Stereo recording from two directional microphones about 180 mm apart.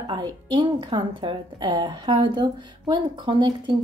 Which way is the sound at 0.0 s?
25° right (ahead or behind).